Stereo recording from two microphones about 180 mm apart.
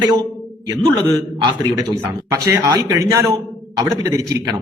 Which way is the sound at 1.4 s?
25° right (ahead or behind).